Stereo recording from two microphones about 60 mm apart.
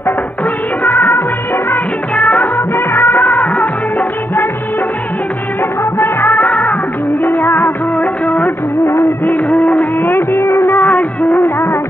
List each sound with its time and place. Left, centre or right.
0.8 s music of bollywood: left
2.3 s music of bollywood: left
5.6 s music of bollywood: left
6.6 s music: left
7.4 s music of bollywood: left
8.0 s music of bollywood: left
8.8 s music of bollywood: left
10.4 s music of bollywood: left